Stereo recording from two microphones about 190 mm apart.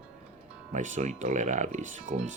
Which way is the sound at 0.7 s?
40° right (ahead or behind).